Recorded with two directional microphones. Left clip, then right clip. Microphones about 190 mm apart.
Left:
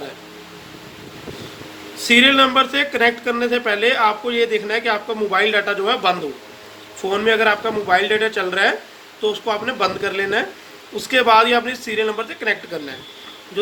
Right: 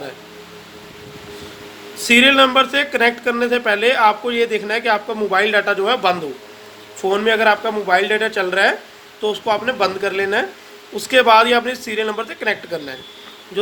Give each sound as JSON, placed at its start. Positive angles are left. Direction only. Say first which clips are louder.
{"t": 2.0, "sound": "speech", "louder": "right 1 dB", "side_deg": -40}